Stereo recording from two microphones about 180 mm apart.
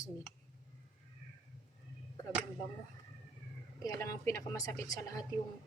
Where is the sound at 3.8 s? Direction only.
20° left (ahead or behind).